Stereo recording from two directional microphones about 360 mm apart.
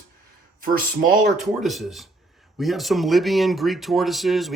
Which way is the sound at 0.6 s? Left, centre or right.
Right.